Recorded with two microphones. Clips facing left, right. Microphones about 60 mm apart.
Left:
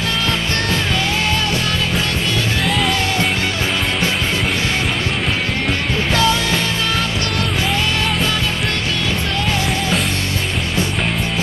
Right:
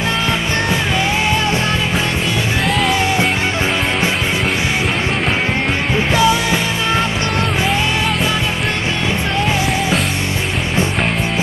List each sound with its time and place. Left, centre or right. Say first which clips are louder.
6.1 s music: right 2 dB; centre